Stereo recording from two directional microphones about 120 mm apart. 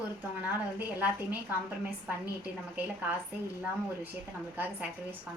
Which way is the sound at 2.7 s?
10° right (ahead or behind).